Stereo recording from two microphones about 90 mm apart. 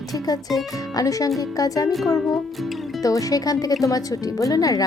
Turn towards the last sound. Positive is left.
turn(degrees=40)  # may be behind; listen again after turning